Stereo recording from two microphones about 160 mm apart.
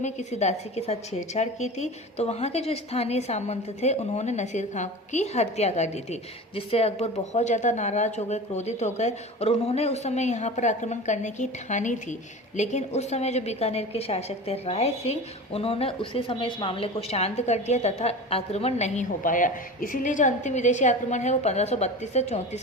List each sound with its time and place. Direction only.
0.0 s a woman's voice: 45° left (ahead or behind)